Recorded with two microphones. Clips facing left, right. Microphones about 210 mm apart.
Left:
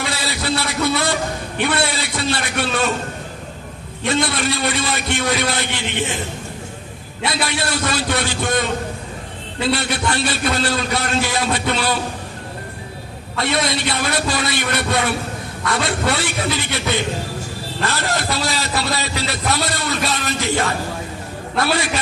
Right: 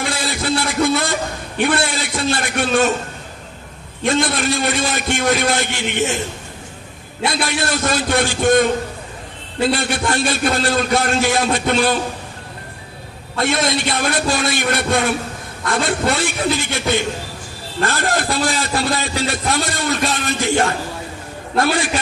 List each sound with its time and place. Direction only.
0.0 s a sound: 50° right (ahead or behind)
4.0 s a man's voice: 50° right (ahead or behind)
7.2 s a man's voice: 45° right (ahead or behind)
13.4 s a man's voice: 50° right (ahead or behind)